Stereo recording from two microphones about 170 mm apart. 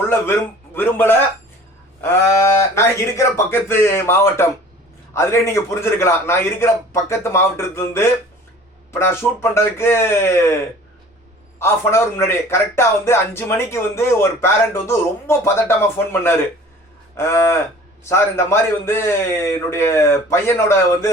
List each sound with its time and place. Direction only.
0.1 s speech: 10° left (ahead or behind)
11.6 s speech: 15° left (ahead or behind)